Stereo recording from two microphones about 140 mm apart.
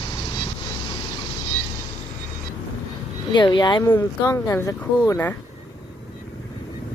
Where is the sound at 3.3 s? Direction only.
30° left (ahead or behind).